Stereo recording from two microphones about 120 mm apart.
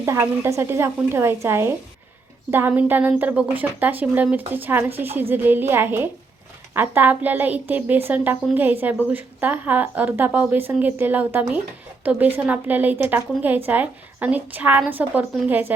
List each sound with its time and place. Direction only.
0.0 s a woman's voice: 20° right (ahead or behind)